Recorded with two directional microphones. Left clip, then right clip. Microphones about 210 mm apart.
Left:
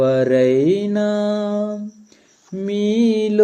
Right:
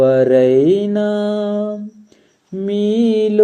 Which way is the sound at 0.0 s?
5° left (ahead or behind).